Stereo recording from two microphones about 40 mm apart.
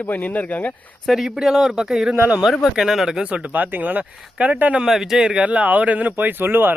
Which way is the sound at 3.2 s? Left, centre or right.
Right.